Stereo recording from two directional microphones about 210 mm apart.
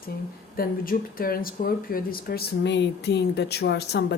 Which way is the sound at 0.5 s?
45° left (ahead or behind).